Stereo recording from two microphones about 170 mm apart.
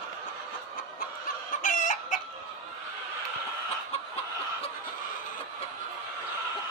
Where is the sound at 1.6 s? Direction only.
50° left (ahead or behind).